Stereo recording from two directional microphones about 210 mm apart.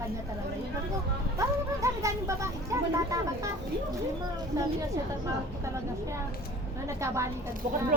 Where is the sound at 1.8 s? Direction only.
15° right (ahead or behind).